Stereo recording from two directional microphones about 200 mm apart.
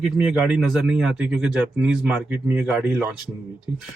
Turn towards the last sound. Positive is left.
turn(degrees=-5)  # may be behind; listen again after turning